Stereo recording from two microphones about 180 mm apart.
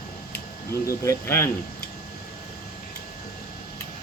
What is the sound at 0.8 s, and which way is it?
Speech, 15° left (ahead or behind).